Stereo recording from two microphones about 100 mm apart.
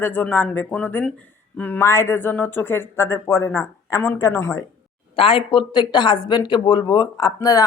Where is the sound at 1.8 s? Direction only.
25° left (ahead or behind).